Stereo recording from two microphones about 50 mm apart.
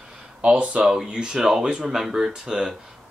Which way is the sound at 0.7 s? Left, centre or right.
Centre.